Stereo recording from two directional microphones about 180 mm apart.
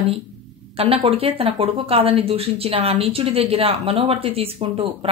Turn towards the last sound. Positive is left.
turn(degrees=-30)  # may be behind; listen again after turning